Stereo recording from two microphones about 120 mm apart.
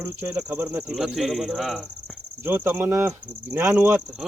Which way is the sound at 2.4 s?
15° right (ahead or behind).